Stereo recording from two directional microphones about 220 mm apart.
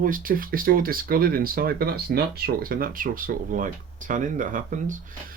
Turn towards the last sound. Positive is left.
turn(degrees=-35)  # may be behind; listen again after turning